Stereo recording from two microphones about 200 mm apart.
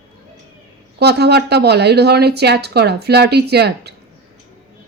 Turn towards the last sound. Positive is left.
turn(degrees=-55)  # may be behind; listen again after turning